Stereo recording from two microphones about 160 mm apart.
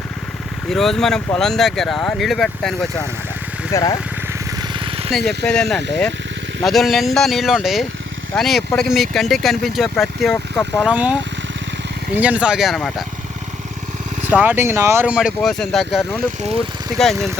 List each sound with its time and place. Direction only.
0.7 s speech: centre (ahead or behind)
3.7 s speech: 20° left (ahead or behind)
4.7 s vehicle: 35° right (ahead or behind)
5.5 s speech: 5° left (ahead or behind)
10.8 s speech: 10° right (ahead or behind)
14.3 s speech: 10° right (ahead or behind)